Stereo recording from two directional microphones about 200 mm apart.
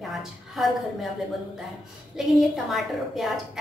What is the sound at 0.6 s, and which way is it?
Speech, centre (ahead or behind).